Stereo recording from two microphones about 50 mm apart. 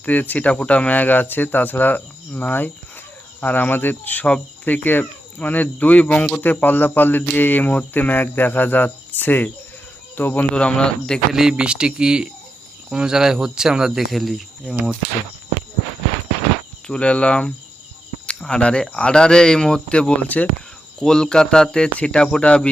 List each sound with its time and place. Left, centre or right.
0.0 s speech: left
10.5 s speech: left
11.3 s speech: centre
14.1 s speech: centre
16.8 s speech: left